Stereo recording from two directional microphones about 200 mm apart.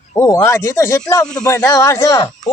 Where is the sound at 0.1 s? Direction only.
15° left (ahead or behind).